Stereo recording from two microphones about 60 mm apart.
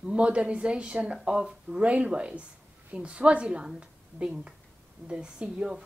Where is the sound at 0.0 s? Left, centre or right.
Centre.